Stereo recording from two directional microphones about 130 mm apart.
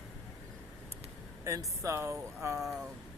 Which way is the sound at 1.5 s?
25° right (ahead or behind).